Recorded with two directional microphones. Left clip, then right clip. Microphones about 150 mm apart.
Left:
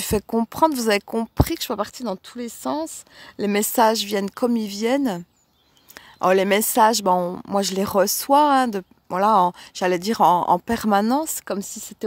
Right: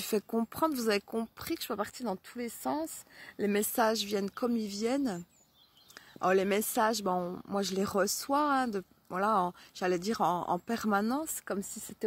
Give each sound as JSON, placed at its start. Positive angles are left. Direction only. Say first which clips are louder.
{"t": 0.0, "sound": "speech", "louder": "left 9 dB", "side_deg": 60}